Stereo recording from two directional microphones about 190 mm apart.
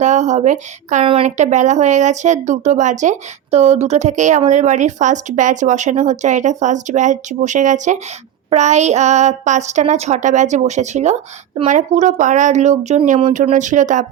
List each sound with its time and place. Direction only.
0.0 s speech: 40° right (ahead or behind)